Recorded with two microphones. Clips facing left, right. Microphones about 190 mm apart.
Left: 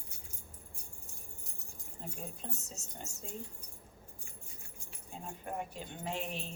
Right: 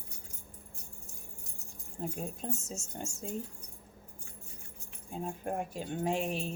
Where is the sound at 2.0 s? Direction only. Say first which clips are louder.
Right 7 dB; 45° right (ahead or behind).